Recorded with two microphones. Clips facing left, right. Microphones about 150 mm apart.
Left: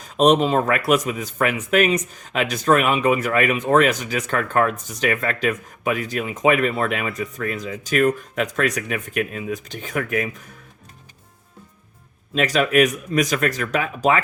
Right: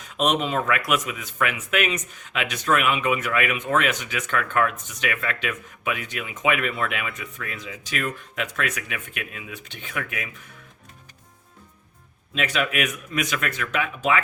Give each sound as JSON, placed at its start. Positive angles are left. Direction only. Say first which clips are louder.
{"t": 0.0, "sound": "speech", "louder": "left 7 dB", "side_deg": 35}
{"t": 12.3, "sound": "speech", "louder": "left 7 dB", "side_deg": 40}